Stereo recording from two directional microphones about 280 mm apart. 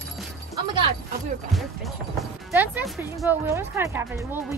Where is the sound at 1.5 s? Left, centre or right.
Centre.